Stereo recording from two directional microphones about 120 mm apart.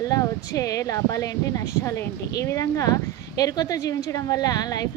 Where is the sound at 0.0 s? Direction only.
30° left (ahead or behind).